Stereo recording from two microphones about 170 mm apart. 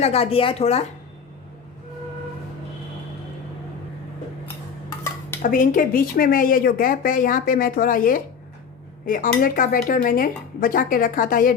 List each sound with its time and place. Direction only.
0.0 s speech: 35° left (ahead or behind)
4.9 s dishes: 15° left (ahead or behind)
5.4 s speech: 55° left (ahead or behind)